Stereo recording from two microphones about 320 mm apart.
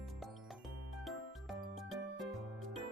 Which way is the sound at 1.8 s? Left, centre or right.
Centre.